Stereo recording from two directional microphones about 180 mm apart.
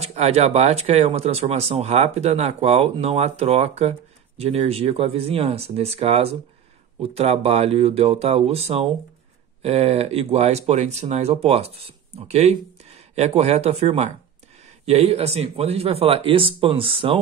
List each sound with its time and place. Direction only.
0.0 s speech: 35° right (ahead or behind)